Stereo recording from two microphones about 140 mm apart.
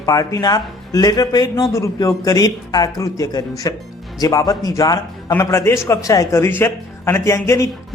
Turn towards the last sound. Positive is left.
turn(degrees=20)  # may be behind; listen again after turning